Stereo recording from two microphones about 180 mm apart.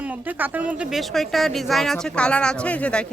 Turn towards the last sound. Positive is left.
turn(degrees=5)  # may be behind; listen again after turning